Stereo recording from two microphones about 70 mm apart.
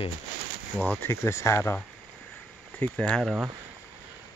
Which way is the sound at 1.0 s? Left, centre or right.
Left.